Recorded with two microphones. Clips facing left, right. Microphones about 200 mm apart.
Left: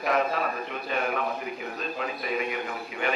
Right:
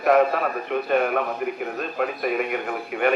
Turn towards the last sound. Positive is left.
turn(degrees=-55)  # may be behind; listen again after turning